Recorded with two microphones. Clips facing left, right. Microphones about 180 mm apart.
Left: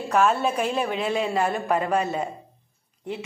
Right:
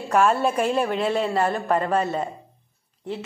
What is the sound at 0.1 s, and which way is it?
A man's voice, centre (ahead or behind).